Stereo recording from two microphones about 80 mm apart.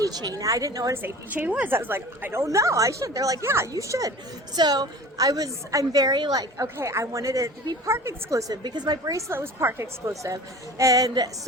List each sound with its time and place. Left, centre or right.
0.0 s a woman's voice: right
1.0 s a woman's voice: right
3.4 s a woman's voice: right
3.7 s a woman's voice: right
4.5 s a woman's voice: right
8.6 s a woman's voice: right
9.1 s a woman's voice: right